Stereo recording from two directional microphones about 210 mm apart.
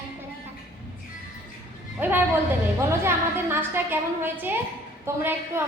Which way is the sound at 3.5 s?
10° right (ahead or behind).